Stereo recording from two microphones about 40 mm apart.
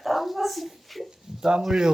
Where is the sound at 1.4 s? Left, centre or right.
Right.